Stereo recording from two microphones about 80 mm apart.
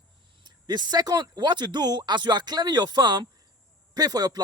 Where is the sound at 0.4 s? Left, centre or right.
Right.